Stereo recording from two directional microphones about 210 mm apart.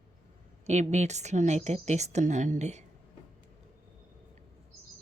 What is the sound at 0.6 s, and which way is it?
A woman's voice, 35° right (ahead or behind).